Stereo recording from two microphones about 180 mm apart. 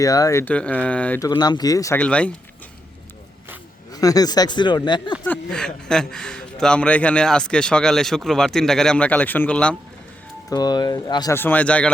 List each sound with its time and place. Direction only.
0.0 s speech: 20° left (ahead or behind)
1.2 s speech: 20° left (ahead or behind)
2.0 s speech: 5° left (ahead or behind)
3.9 s speech: 20° left (ahead or behind)
5.2 s a man's voice: 5° left (ahead or behind)
10.5 s speech: 20° left (ahead or behind)
11.3 s speech: 10° left (ahead or behind)